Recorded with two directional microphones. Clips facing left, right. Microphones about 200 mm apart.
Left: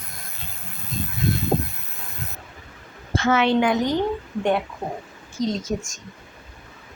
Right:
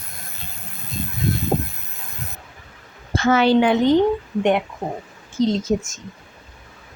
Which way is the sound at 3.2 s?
40° right (ahead or behind).